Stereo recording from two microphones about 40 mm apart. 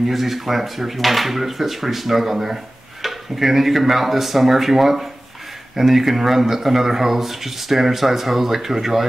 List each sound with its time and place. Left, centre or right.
0.1 s speech: centre